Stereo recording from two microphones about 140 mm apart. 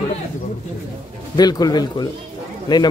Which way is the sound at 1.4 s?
30° left (ahead or behind).